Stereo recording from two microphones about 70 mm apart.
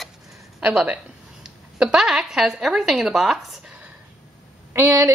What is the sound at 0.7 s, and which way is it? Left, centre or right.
A woman's voice, centre.